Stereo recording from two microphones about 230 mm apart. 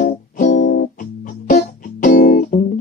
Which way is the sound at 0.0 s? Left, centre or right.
Left.